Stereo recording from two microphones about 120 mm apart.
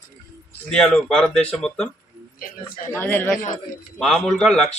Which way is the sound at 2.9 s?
15° left (ahead or behind).